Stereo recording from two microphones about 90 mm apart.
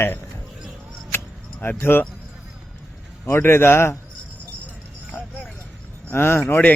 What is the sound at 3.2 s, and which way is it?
Speech, 25° left (ahead or behind).